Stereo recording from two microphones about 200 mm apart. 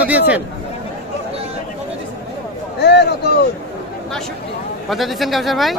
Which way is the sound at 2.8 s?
55° left (ahead or behind).